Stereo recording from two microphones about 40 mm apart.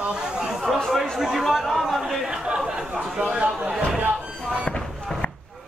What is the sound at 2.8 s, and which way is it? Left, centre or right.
Speech, centre.